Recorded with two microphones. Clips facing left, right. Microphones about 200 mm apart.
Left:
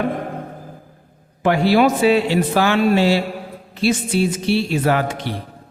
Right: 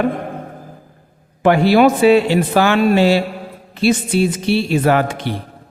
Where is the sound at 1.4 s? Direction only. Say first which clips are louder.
Right 3 dB; 60° right (ahead or behind).